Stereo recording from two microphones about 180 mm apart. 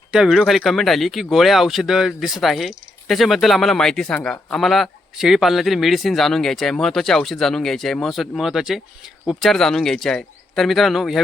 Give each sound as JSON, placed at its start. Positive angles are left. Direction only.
{"t": 0.1, "sound": "speech", "side_deg": -5}